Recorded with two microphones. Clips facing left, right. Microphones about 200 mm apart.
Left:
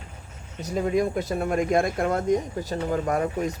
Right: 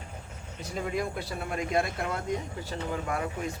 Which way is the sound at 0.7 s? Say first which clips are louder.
Left 8 dB; 45° left (ahead or behind).